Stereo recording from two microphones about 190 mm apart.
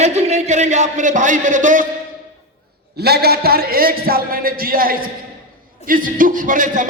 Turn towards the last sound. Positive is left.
turn(degrees=-45)  # may be behind; listen again after turning